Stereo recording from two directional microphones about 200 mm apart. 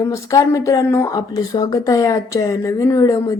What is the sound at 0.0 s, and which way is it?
Speech, 15° left (ahead or behind).